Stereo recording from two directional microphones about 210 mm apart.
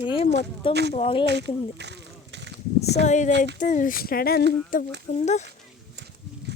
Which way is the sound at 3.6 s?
40° left (ahead or behind).